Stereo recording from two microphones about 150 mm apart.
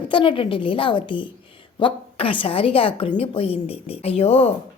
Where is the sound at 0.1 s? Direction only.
35° left (ahead or behind).